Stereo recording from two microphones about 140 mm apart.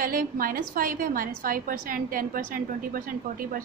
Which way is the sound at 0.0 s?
85° right.